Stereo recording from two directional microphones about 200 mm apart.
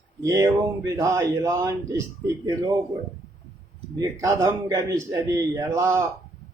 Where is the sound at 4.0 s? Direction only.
20° right (ahead or behind).